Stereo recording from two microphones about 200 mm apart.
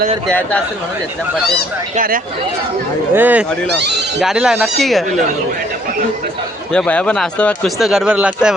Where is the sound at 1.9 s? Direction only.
45° right (ahead or behind).